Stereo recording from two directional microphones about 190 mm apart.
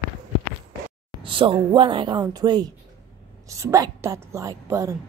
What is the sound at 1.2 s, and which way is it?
A woman's voice, 25° right (ahead or behind).